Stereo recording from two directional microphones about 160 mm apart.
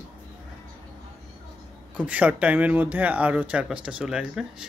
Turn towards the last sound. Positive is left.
turn(degrees=-5)  # may be behind; listen again after turning